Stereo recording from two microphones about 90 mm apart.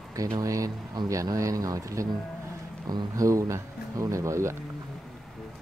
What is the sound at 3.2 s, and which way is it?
Speech, 35° right (ahead or behind).